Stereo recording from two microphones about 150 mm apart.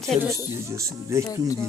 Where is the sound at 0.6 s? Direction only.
20° right (ahead or behind).